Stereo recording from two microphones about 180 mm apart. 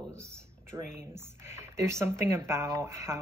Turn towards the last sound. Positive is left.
turn(degrees=-15)  # may be behind; listen again after turning